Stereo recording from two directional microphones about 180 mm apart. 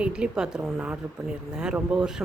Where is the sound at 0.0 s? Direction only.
5° right (ahead or behind).